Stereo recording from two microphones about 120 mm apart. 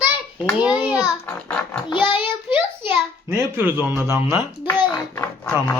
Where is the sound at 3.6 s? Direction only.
15° right (ahead or behind).